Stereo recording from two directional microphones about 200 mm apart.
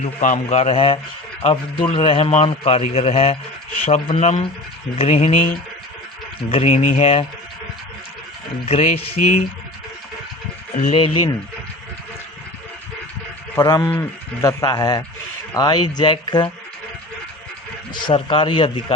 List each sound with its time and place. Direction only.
0.0 s a man's voice: 35° left (ahead or behind)
6.5 s a man's voice: 30° left (ahead or behind)
8.6 s a man's voice: 35° left (ahead or behind)
10.9 s a man's voice: 25° left (ahead or behind)
13.6 s a man's voice: 15° left (ahead or behind)
17.9 s a man's voice: 25° left (ahead or behind)